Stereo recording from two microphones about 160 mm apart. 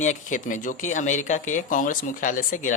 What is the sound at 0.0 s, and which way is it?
Speech, 50° left (ahead or behind).